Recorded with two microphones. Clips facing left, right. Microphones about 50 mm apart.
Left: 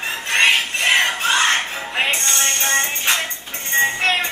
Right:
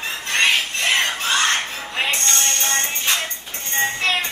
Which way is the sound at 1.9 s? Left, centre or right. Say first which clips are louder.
Left 1 dB; left.